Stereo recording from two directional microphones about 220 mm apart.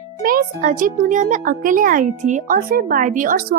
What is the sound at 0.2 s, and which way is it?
A woman's voice, 40° right (ahead or behind).